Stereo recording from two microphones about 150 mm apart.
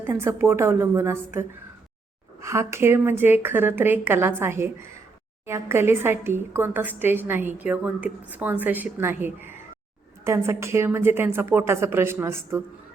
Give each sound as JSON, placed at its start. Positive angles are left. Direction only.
{"t": 0.0, "sound": "a woman's voice", "side_deg": -15}